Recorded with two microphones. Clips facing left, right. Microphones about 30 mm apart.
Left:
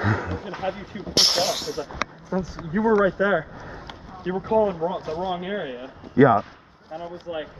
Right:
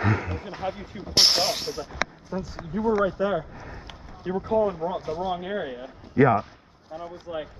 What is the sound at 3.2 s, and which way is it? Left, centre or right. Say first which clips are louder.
Speech: left 4 dB; left.